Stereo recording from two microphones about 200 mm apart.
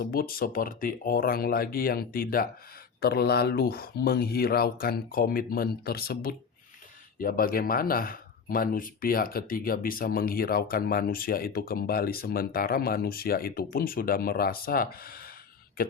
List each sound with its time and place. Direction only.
0.0 s speech: 45° left (ahead or behind)